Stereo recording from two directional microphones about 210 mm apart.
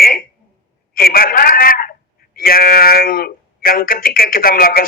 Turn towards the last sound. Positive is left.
turn(degrees=45)  # may be behind; listen again after turning